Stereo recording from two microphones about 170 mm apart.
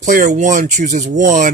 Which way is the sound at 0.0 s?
50° right (ahead or behind).